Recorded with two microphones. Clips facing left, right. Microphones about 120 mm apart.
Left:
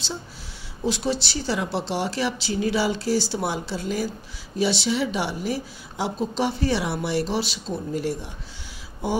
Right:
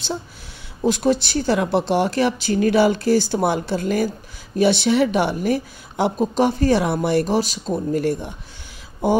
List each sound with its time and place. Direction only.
0.8 s speech: 50° right (ahead or behind)